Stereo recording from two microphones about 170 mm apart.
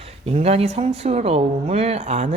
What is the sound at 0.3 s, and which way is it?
A woman's voice, 35° right (ahead or behind).